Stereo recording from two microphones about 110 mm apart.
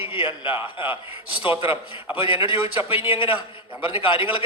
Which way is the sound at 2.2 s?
55° left (ahead or behind).